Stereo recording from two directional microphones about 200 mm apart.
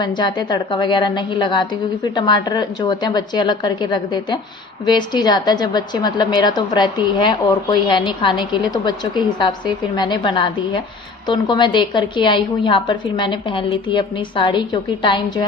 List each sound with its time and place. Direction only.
0.0 s a woman's voice: 20° left (ahead or behind)